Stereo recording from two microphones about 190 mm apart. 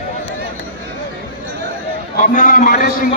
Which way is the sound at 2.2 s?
45° left (ahead or behind).